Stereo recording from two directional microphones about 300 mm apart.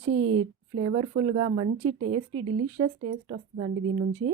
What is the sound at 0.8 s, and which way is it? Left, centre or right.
A woman's voice, centre.